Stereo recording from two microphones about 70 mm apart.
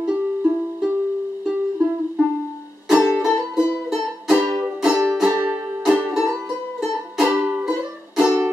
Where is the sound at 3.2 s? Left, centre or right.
Centre.